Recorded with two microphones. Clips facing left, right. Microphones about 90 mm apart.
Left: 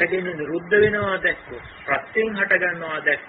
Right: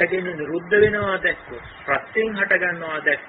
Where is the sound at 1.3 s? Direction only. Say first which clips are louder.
Even; 20° right (ahead or behind).